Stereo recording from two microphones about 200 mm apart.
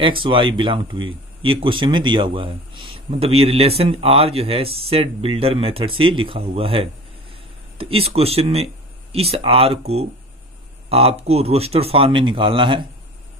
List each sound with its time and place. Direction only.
0.0 s speech: 25° right (ahead or behind)